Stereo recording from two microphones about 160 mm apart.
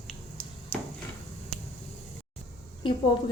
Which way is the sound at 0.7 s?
10° left (ahead or behind).